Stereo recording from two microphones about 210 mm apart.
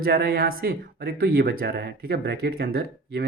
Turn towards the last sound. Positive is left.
turn(degrees=-50)  # may be behind; listen again after turning